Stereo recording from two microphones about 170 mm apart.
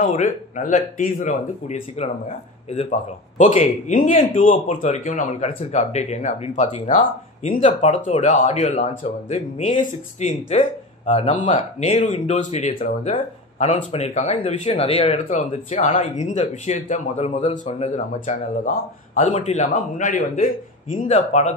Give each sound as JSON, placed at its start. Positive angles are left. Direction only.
{"t": 0.0, "sound": "speech", "side_deg": 50}
{"t": 4.6, "sound": "speech", "side_deg": 40}
{"t": 5.5, "sound": "speech", "side_deg": 40}